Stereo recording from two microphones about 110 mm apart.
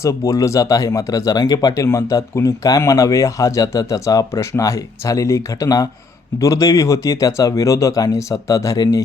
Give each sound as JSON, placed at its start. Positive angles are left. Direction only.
{"t": 0.0, "sound": "speech", "side_deg": 30}